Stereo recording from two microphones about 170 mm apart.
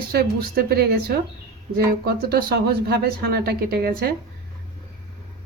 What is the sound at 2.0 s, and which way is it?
Speech, 70° right (ahead or behind).